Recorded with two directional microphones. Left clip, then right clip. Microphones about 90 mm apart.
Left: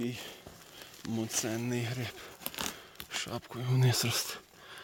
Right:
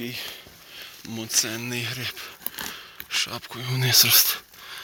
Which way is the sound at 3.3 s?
30° left (ahead or behind).